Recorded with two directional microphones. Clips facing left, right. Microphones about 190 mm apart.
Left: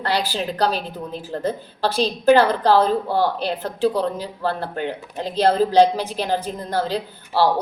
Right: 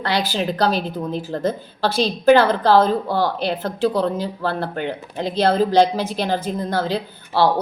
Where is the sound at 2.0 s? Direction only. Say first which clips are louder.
Right 1 dB; 10° left (ahead or behind).